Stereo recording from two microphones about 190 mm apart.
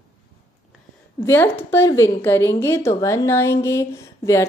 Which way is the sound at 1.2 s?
15° left (ahead or behind).